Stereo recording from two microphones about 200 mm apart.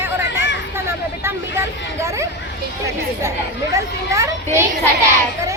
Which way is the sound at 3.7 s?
15° right (ahead or behind).